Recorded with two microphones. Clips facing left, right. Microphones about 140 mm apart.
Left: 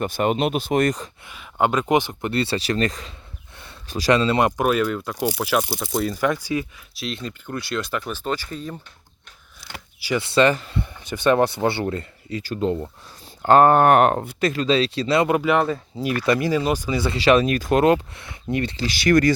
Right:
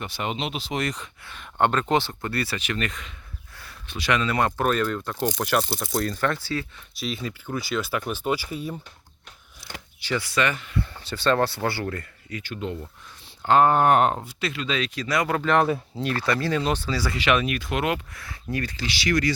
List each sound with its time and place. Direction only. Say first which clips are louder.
0.0 s speech: left 9 dB; 50° left (ahead or behind)
1.2 s speech: left 1 dB; 10° left (ahead or behind); by 3.1 s 35° left (ahead or behind)
3.5 s a sound: left 3 dB; 25° left (ahead or behind)
3.8 s speech: left 6 dB; 40° left (ahead or behind)
4.4 s speech: left 4 dB; 15° left (ahead or behind)
6.9 s speech: even; centre (ahead or behind)
10.2 s speech: left 8 dB; 30° left (ahead or behind)
10.8 s speech: left 1 dB; 15° left (ahead or behind)
12.4 s speech: left 8 dB; 35° left (ahead or behind); by 14.3 s 65° left (ahead or behind)
14.4 s speech: left 8 dB; 40° left (ahead or behind)
15.4 s speech: left 2 dB; 10° left (ahead or behind)
16.2 s speech: left 6 dB; 20° left (ahead or behind)
16.5 s speech: left 3 dB; 10° left (ahead or behind); by 18.9 s 25° left (ahead or behind)
18.9 s speech: left 7 dB; 50° left (ahead or behind)